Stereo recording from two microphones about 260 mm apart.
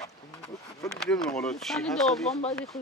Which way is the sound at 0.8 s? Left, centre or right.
Centre.